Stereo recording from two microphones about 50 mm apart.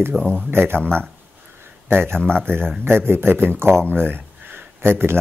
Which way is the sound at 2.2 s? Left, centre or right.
Centre.